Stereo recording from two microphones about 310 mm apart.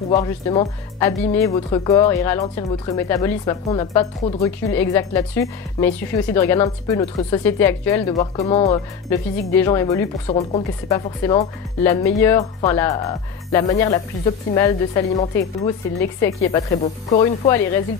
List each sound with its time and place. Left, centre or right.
0.1 s speech: centre
10.2 s speech: centre
11.2 s speech: centre